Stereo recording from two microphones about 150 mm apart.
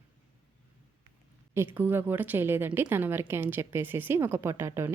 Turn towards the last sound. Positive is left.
turn(degrees=-15)  # may be behind; listen again after turning